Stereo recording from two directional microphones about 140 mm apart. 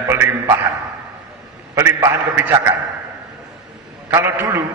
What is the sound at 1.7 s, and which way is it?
Speech, 20° right (ahead or behind).